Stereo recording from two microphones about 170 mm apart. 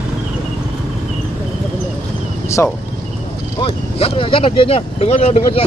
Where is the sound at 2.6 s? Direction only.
15° left (ahead or behind).